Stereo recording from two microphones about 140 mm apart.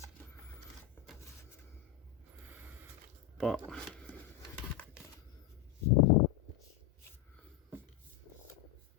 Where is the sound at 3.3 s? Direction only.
Centre (ahead or behind).